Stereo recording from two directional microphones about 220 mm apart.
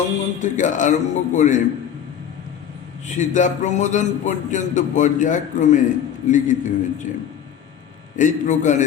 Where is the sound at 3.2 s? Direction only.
35° left (ahead or behind).